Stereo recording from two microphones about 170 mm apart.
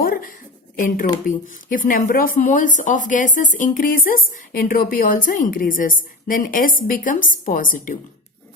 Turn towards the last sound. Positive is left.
turn(degrees=50)  # may be behind; listen again after turning